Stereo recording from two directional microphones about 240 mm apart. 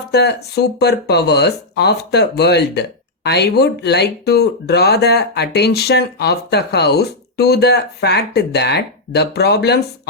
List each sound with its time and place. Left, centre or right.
0.1 s speech: left